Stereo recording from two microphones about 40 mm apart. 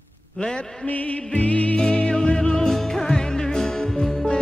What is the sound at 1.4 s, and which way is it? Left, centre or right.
Music, left.